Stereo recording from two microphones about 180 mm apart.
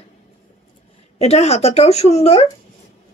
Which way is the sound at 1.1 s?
35° left (ahead or behind).